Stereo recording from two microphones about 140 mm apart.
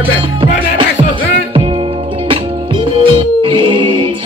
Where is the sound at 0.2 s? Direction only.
35° right (ahead or behind).